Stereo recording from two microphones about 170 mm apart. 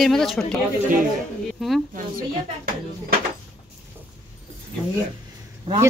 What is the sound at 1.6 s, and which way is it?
Speech, 5° right (ahead or behind).